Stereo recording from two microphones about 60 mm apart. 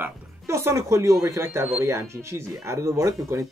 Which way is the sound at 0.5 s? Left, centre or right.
Right.